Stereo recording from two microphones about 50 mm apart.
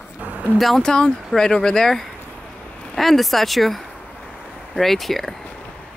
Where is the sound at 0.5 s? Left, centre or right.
Centre.